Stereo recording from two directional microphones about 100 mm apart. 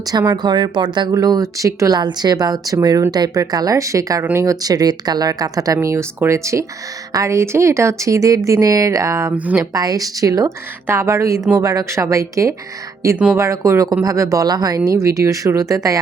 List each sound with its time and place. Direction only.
0.0 s speech: 40° right (ahead or behind)
9.3 s speech: 15° right (ahead or behind)
9.6 s speech: 35° right (ahead or behind)